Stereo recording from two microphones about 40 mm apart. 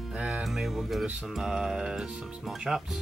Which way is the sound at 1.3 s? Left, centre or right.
Centre.